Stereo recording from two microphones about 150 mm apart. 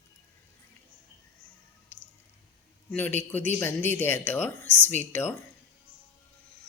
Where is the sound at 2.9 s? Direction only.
10° left (ahead or behind).